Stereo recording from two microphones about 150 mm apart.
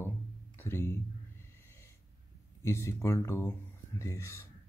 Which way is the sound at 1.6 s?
15° left (ahead or behind).